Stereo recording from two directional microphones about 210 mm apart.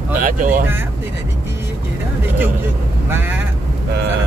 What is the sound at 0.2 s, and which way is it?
Speech, 40° right (ahead or behind).